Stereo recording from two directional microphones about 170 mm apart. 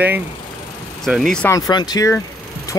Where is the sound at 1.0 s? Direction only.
Centre (ahead or behind).